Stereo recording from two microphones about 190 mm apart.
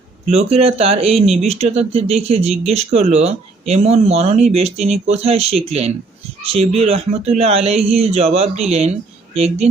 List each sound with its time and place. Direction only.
0.3 s speech: 35° right (ahead or behind)